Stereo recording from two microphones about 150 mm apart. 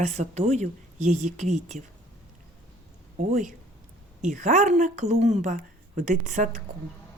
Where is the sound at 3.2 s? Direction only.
55° right (ahead or behind).